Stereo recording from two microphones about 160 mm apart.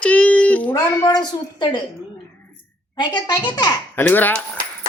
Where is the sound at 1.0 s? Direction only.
25° left (ahead or behind).